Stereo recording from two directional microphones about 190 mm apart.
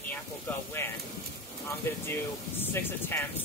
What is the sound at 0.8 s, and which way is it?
Speech, 15° left (ahead or behind).